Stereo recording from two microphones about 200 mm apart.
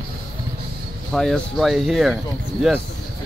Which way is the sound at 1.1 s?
Centre (ahead or behind).